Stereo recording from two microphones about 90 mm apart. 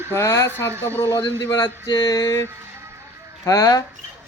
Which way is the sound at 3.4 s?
40° left (ahead or behind).